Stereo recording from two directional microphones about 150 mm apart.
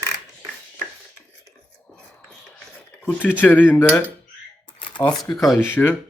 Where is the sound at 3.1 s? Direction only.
10° left (ahead or behind).